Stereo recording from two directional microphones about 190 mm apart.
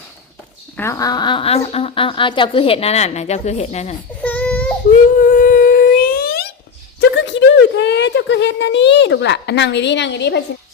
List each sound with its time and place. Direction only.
0.8 s speech: 15° left (ahead or behind); by 3.9 s 35° left (ahead or behind)
4.2 s baby cry: 10° left (ahead or behind)
4.9 s a sound: 45° left (ahead or behind)
7.0 s speech: 65° left (ahead or behind)